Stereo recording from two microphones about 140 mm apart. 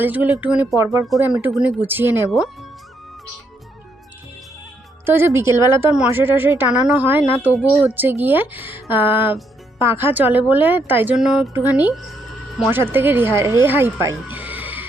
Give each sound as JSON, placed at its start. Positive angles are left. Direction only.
{"t": 0.0, "sound": "speech", "side_deg": -10}
{"t": 1.0, "sound": "speech", "side_deg": 0}
{"t": 1.5, "sound": "speech", "side_deg": -10}
{"t": 2.3, "sound": "speech", "side_deg": 0}
{"t": 5.0, "sound": "a woman's voice", "side_deg": -15}
{"t": 11.5, "sound": "speech", "side_deg": -15}